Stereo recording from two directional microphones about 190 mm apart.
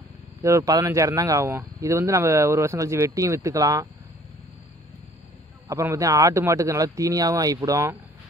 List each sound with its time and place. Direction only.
0.4 s speech: 15° right (ahead or behind)
5.7 s speech: 15° right (ahead or behind)